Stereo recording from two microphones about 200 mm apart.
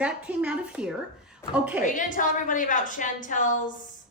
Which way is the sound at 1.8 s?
40° left (ahead or behind).